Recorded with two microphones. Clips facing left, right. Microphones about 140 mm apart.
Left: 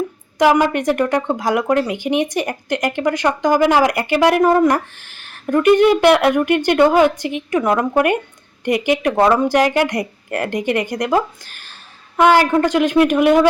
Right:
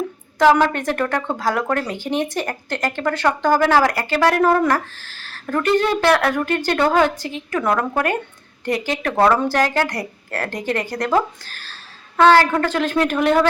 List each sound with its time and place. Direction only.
0.3 s speech: 15° left (ahead or behind)